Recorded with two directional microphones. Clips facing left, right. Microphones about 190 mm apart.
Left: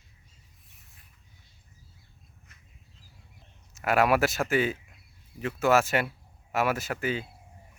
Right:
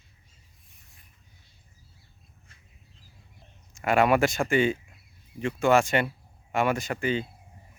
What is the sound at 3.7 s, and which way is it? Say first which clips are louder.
Speech: right 2 dB; 5° left (ahead or behind).